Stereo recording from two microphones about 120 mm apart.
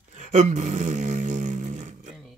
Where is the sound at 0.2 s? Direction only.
85° right.